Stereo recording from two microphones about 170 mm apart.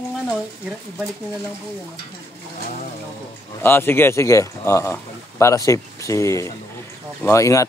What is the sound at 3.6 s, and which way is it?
Speech, 15° left (ahead or behind).